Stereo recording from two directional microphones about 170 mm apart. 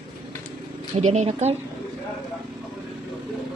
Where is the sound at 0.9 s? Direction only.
40° right (ahead or behind).